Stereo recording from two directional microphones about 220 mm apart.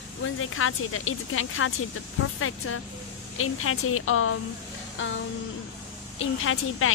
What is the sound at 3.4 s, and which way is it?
Speech, 75° left (ahead or behind).